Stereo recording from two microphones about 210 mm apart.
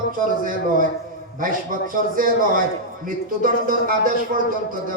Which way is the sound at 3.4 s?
40° right (ahead or behind).